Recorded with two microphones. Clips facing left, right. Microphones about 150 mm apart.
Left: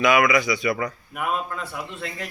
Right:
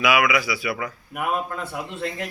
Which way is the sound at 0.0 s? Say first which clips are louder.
Left 2 dB; 5° right (ahead or behind).